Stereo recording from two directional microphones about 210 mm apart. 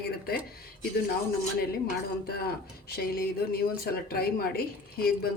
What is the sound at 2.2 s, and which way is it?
Speech, 45° left (ahead or behind).